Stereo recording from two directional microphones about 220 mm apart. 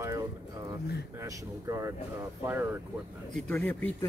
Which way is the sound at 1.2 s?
15° right (ahead or behind).